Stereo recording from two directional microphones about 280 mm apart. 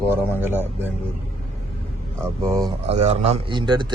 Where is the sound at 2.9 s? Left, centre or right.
Right.